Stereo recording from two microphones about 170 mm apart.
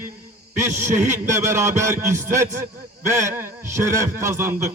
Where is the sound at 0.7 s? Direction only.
45° right (ahead or behind).